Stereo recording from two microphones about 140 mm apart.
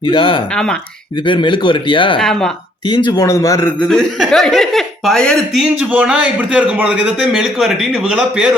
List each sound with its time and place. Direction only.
0.0 s speech: 40° left (ahead or behind)
0.5 s a man's voice: 5° left (ahead or behind)
1.2 s speech: 35° left (ahead or behind)
2.1 s a man's voice: 5° left (ahead or behind)
2.8 s a man's voice: 35° left (ahead or behind); by 3.8 s 15° left (ahead or behind)
3.8 s a man's voice: 5° left (ahead or behind)
5.6 s a man's voice: 5° right (ahead or behind)